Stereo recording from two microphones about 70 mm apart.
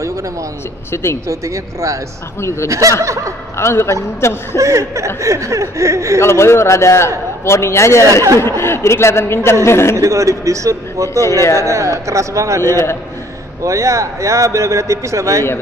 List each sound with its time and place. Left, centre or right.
1.2 s speech: right
3.0 s speech: right
3.5 s speech: left
4.6 s speech: right
6.2 s speech: left
8.1 s speech: right
8.4 s speech: left
9.9 s speech: right